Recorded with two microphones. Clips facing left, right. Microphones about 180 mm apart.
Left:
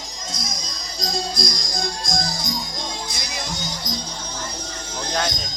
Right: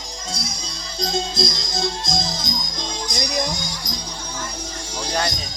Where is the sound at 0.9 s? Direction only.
25° right (ahead or behind).